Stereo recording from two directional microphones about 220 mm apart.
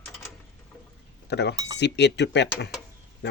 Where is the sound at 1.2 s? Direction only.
50° left (ahead or behind).